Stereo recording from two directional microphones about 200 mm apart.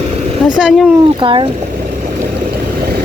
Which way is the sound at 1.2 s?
25° right (ahead or behind).